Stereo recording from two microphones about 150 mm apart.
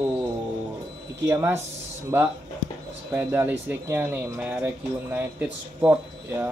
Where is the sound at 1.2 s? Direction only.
15° right (ahead or behind).